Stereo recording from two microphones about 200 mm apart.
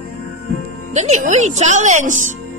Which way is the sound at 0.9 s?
35° right (ahead or behind).